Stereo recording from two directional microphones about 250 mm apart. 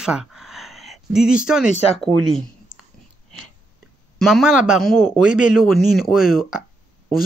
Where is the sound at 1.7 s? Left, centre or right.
Left.